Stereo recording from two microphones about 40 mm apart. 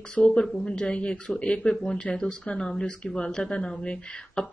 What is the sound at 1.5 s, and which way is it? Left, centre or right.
Speech, centre.